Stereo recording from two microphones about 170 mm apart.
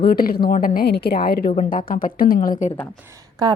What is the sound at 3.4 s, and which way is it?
Speech, 25° right (ahead or behind).